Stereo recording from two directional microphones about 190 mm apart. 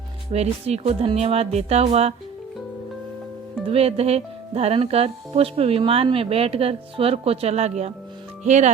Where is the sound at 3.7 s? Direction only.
30° right (ahead or behind).